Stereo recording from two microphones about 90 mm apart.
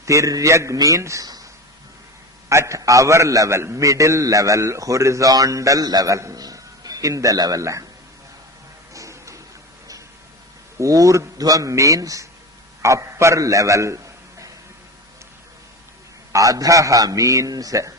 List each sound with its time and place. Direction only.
0.0 s a man's voice: 35° right (ahead or behind)
2.5 s a man's voice: 35° right (ahead or behind)
8.9 s music: 35° right (ahead or behind)
10.8 s a man's voice: 40° right (ahead or behind)
16.3 s a man's voice: 40° right (ahead or behind)